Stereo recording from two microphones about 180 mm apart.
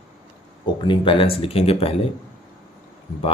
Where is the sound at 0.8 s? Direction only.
30° left (ahead or behind).